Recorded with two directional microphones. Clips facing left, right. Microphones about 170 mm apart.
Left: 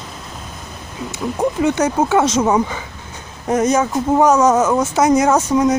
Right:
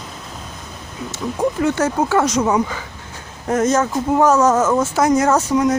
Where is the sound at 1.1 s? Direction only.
20° left (ahead or behind).